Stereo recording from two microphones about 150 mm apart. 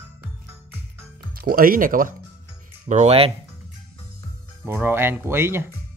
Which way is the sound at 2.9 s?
45° right (ahead or behind).